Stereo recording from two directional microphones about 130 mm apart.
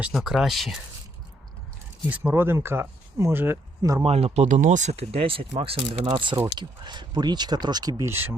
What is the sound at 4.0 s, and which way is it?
Speech, 50° right (ahead or behind).